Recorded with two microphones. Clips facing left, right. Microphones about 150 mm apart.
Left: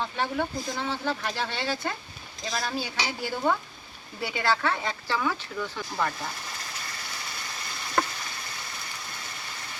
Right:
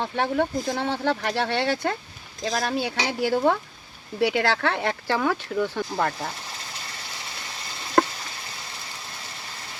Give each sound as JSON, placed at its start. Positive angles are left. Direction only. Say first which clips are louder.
{"t": 0.0, "sound": "speech", "louder": "right 5 dB", "side_deg": -60}